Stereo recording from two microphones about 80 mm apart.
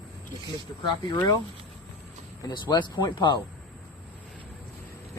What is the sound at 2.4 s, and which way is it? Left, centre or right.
Speech, left.